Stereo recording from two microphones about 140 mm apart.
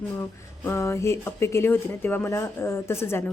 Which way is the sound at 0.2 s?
20° left (ahead or behind).